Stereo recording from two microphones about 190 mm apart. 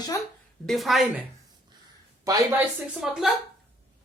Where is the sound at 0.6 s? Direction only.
Centre (ahead or behind).